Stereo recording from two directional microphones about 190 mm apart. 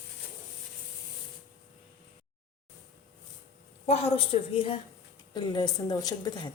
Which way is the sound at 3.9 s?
30° left (ahead or behind).